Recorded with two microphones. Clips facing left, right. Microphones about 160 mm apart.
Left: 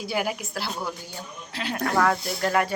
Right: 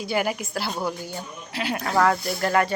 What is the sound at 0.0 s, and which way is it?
A woman's voice, centre (ahead or behind).